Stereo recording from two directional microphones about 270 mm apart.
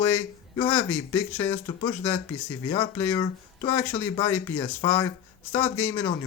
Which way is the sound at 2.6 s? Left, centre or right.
Centre.